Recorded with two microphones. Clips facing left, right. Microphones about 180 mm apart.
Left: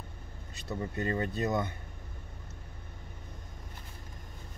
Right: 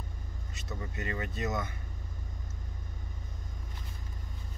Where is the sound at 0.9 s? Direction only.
35° left (ahead or behind).